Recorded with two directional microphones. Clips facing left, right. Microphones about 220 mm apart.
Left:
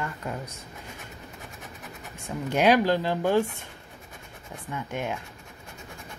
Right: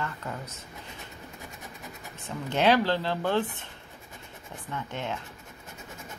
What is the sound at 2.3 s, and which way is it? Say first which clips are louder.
Speech: left 2 dB; 10° left (ahead or behind).